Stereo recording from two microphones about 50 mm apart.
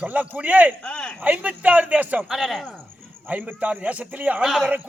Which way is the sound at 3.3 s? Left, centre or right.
Right.